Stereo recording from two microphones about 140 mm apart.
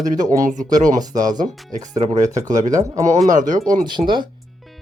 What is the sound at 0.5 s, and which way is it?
Speech, 70° right (ahead or behind).